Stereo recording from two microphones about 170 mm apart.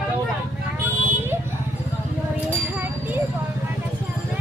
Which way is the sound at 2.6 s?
10° right (ahead or behind).